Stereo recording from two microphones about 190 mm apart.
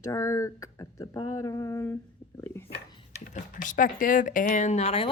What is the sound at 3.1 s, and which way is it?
Speech, 40° left (ahead or behind).